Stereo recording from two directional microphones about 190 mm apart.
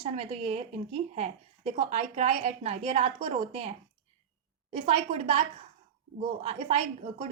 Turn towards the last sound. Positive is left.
turn(degrees=-30)  # may be behind; listen again after turning